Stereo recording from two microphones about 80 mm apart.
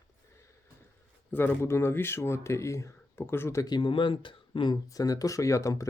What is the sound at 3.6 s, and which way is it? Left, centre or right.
Speech, left.